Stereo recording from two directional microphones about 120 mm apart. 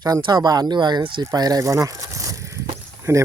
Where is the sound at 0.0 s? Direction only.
30° right (ahead or behind).